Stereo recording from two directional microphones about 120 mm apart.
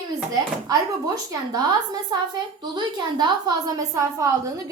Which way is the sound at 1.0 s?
30° right (ahead or behind).